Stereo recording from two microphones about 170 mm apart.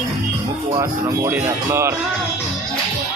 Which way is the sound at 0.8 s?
20° right (ahead or behind).